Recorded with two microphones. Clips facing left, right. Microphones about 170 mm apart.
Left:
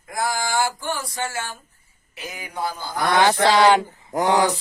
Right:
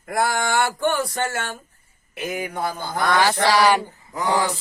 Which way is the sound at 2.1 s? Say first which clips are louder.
Right 5 dB; 55° right (ahead or behind).